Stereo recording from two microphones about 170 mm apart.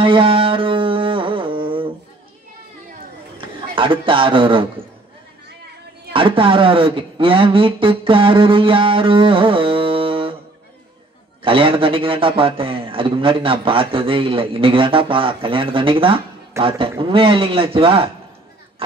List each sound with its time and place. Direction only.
0.0 s music: 30° right (ahead or behind)
3.3 s a man's voice: 30° right (ahead or behind)
6.1 s a man's voice: 30° right (ahead or behind)
11.4 s a man's voice: 30° right (ahead or behind)